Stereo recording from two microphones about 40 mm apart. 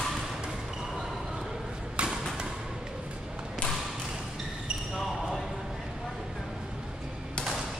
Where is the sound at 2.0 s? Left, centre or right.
Right.